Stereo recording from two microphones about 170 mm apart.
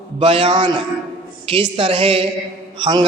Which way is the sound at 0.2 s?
30° right (ahead or behind).